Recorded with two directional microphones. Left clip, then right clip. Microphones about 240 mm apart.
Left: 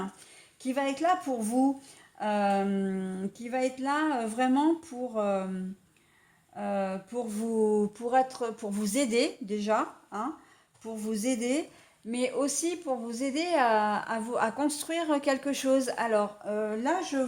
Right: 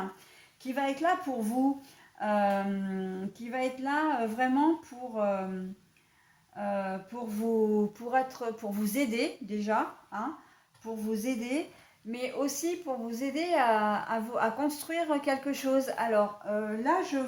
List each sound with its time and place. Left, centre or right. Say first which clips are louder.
0.6 s a woman's voice: left 1 dB; left
6.6 s a woman's voice: left 1 dB; left